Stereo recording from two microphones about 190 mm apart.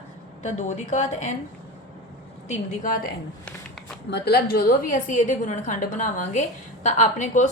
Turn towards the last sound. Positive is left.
turn(degrees=40)  # may be behind; listen again after turning